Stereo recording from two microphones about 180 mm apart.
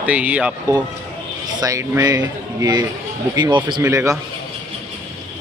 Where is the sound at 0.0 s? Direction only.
10° right (ahead or behind).